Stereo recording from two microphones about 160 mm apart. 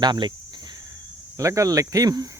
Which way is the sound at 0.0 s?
25° right (ahead or behind).